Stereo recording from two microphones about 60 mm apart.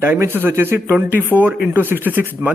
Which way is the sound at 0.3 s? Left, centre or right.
Right.